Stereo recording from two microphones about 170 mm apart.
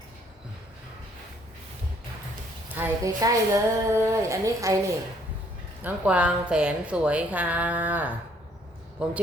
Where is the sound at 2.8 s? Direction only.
15° right (ahead or behind).